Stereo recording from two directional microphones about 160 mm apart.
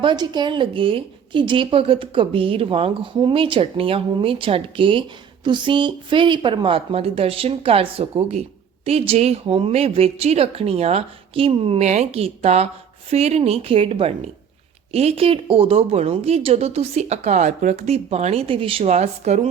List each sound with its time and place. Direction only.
0.0 s a woman's voice: 30° right (ahead or behind); by 19.5 s 45° right (ahead or behind)